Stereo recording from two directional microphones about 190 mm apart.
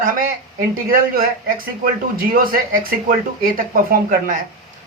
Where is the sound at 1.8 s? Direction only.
50° right (ahead or behind).